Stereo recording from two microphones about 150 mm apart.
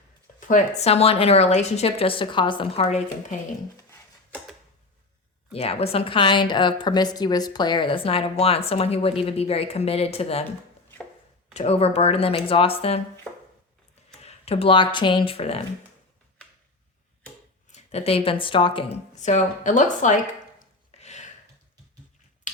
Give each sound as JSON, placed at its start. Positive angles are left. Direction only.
{"t": 0.3, "sound": "a sound", "side_deg": 55}
{"t": 0.8, "sound": "a woman's voice", "side_deg": 45}
{"t": 5.5, "sound": "a woman's voice", "side_deg": 40}
{"t": 11.5, "sound": "a woman's voice", "side_deg": 45}
{"t": 14.2, "sound": "speech", "side_deg": 45}
{"t": 17.7, "sound": "speech", "side_deg": 45}
{"t": 19.1, "sound": "a woman's voice", "side_deg": 50}
{"t": 20.9, "sound": "a sound", "side_deg": 50}
{"t": 22.5, "sound": "a sound", "side_deg": 60}